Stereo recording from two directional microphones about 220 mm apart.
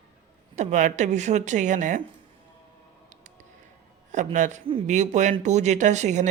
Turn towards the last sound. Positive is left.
turn(degrees=-30)  # may be behind; listen again after turning